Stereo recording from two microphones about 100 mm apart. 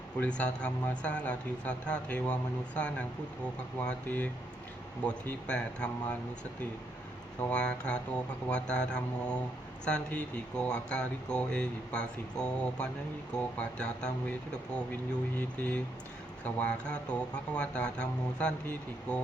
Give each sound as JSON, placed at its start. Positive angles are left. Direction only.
{"t": 0.2, "sound": "speech", "side_deg": 10}
{"t": 7.5, "sound": "speech", "side_deg": 10}